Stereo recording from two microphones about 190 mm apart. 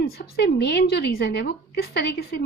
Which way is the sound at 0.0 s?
55° left (ahead or behind).